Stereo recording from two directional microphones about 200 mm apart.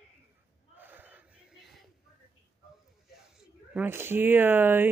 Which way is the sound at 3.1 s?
Centre (ahead or behind).